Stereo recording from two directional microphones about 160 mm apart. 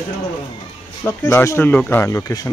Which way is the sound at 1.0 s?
15° left (ahead or behind).